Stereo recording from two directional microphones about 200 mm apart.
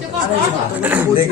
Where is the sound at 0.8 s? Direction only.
10° right (ahead or behind).